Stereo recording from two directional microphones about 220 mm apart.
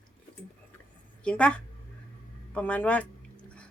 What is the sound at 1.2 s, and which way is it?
A woman's voice, 5° left (ahead or behind).